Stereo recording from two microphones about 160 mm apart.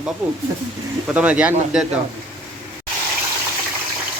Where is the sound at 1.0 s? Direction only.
5° right (ahead or behind).